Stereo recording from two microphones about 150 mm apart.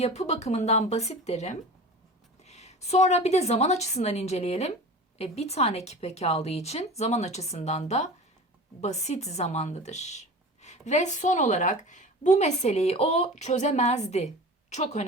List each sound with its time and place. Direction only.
0.0 s speech: 45° left (ahead or behind)